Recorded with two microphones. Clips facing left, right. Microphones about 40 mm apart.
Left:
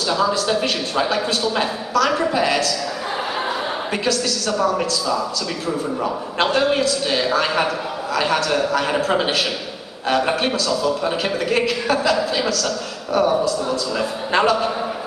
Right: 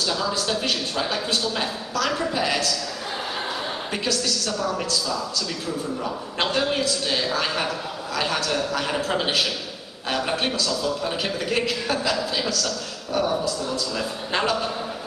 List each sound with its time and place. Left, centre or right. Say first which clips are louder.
0.5 s a woman's voice: left 5 dB; centre
4.6 s a man's voice: left 6 dB; centre
6.4 s a woman's voice: left 5 dB; centre